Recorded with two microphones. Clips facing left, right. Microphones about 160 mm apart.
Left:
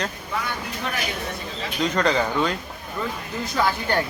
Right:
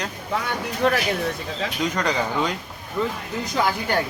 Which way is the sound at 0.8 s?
70° right (ahead or behind).